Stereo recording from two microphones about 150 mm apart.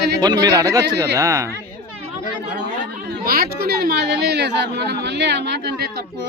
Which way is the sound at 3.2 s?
90° right.